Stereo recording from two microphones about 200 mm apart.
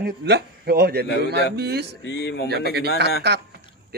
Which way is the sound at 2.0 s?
60° left (ahead or behind).